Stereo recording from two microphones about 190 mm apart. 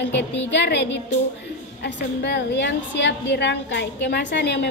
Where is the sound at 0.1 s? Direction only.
65° left (ahead or behind).